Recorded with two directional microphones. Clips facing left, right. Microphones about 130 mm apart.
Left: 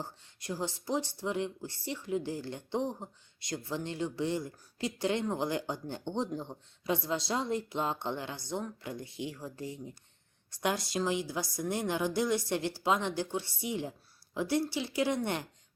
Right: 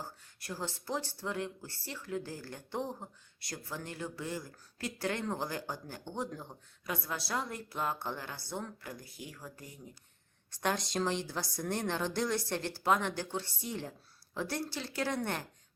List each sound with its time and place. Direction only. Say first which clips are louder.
0.0 s speech: left 3 dB; 20° left (ahead or behind)
10.5 s a woman's voice: left 1 dB; 10° left (ahead or behind)